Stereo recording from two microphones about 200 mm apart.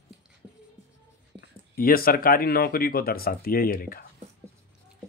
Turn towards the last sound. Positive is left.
turn(degrees=45)  # may be behind; listen again after turning